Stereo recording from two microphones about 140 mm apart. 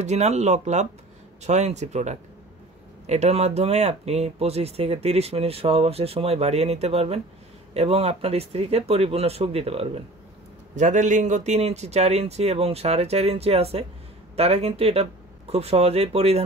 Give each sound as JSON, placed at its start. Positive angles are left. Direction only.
{"t": 0.0, "sound": "speech", "side_deg": -55}
{"t": 10.8, "sound": "speech", "side_deg": -60}